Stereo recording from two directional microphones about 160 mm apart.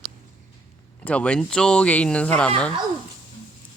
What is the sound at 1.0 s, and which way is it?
Speech, 5° left (ahead or behind).